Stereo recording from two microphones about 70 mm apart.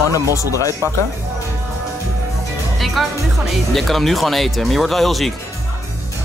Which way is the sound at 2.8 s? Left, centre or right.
Centre.